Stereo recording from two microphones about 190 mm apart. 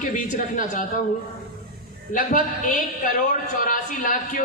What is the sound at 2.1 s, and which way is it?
Speech, 45° left (ahead or behind).